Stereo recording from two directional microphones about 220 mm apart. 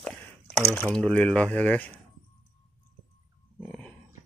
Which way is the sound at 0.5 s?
10° left (ahead or behind).